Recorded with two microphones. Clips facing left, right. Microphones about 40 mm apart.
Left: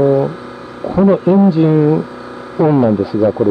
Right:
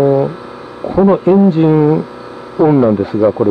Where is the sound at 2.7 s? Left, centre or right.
Centre.